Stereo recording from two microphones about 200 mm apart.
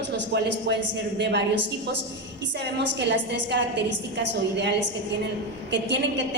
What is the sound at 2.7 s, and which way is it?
A woman's voice, 60° right (ahead or behind).